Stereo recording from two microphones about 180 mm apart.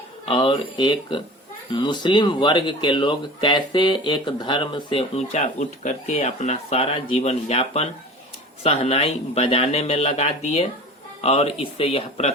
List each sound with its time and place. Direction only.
0.3 s speech: 30° left (ahead or behind)